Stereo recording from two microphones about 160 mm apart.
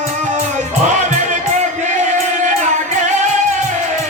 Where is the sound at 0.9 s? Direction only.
50° right (ahead or behind).